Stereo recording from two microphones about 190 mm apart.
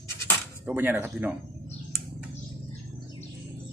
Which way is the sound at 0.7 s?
10° right (ahead or behind).